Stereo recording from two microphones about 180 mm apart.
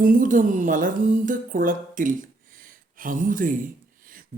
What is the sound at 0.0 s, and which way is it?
Music, 50° right (ahead or behind).